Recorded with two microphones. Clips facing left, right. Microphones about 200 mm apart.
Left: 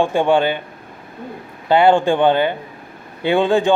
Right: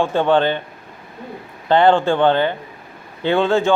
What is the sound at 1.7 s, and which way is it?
A man's voice, 10° left (ahead or behind).